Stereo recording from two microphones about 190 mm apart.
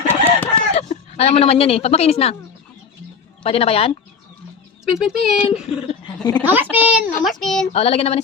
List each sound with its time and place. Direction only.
0.5 s speech: 35° left (ahead or behind)
3.4 s child singing: 30° left (ahead or behind)
4.9 s speech: centre (ahead or behind)
5.4 s speech: 30° left (ahead or behind)
6.4 s a child's voice: 10° right (ahead or behind)
7.7 s child singing: 30° left (ahead or behind)